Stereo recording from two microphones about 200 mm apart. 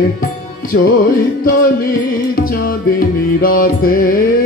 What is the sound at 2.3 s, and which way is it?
Music, 45° left (ahead or behind).